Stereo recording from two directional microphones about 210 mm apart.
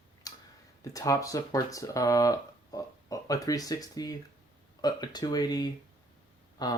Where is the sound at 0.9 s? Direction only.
15° left (ahead or behind).